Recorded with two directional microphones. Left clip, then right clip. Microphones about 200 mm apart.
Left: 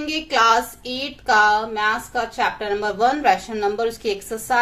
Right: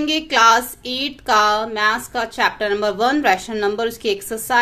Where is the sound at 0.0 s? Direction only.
35° right (ahead or behind).